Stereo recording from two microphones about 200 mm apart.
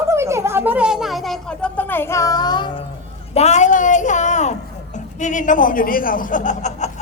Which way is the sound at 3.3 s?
35° left (ahead or behind).